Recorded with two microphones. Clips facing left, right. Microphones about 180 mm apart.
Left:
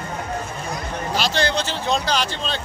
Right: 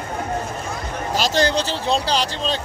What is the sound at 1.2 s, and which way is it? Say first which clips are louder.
Speech: right 3 dB; 40° right (ahead or behind).